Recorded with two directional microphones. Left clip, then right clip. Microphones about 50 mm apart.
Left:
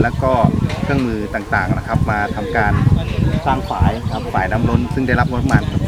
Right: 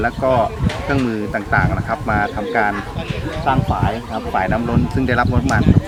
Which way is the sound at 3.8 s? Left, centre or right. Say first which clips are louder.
Even; centre.